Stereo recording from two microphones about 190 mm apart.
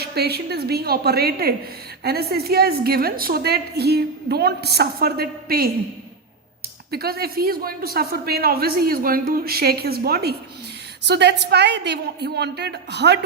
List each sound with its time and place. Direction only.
0.0 s a woman's voice: 55° right (ahead or behind)
6.9 s a woman's voice: 55° right (ahead or behind)